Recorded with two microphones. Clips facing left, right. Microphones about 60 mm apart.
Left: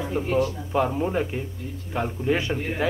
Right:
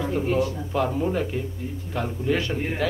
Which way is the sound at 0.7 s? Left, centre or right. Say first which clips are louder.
Left 1 dB; centre.